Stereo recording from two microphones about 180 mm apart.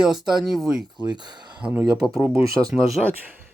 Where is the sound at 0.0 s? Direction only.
Centre (ahead or behind).